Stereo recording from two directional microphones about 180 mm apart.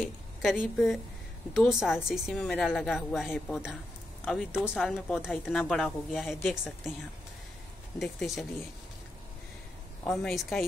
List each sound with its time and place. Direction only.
0.0 s a woman's voice: centre (ahead or behind)
8.0 s speech: centre (ahead or behind)
10.0 s speech: 5° left (ahead or behind)